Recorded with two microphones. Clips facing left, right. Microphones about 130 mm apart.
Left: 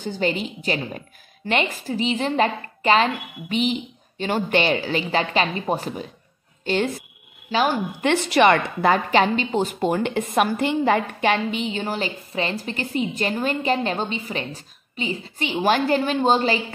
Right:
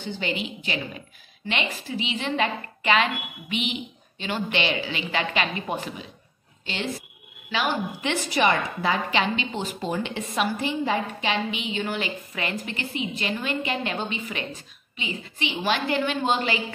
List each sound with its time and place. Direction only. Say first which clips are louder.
0.0 s a woman's voice: left 5 dB; 40° left (ahead or behind)
8.1 s a woman's voice: left 6 dB; 65° left (ahead or behind); by 16.6 s 35° left (ahead or behind)